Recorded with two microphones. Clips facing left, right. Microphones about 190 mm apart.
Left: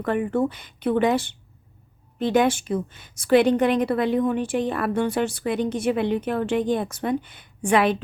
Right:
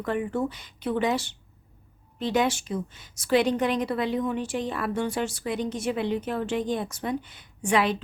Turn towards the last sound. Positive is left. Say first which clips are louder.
# left 4 dB
turn(degrees=55)  # may be behind; listen again after turning